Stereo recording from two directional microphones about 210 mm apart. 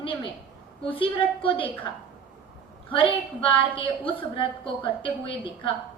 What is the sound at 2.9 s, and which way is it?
A woman's voice, 25° left (ahead or behind).